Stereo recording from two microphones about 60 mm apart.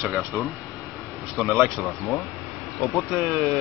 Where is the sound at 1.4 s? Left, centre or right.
Centre.